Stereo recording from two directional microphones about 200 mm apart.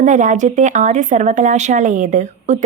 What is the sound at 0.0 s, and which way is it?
A woman's voice, 40° right (ahead or behind).